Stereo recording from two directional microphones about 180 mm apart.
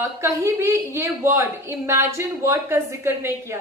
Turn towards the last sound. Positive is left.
turn(degrees=-15)  # may be behind; listen again after turning